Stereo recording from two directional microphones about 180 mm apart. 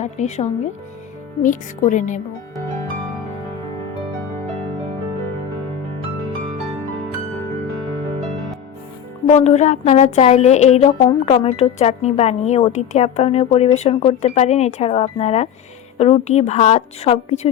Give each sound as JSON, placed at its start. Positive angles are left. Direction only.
{"t": 0.0, "sound": "speech", "side_deg": 40}
{"t": 9.2, "sound": "a woman's voice", "side_deg": 40}